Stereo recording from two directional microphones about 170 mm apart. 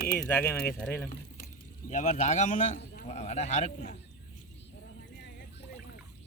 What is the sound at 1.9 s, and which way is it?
A man's voice, 45° left (ahead or behind).